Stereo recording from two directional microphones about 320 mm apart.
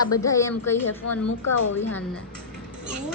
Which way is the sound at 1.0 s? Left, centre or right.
Left.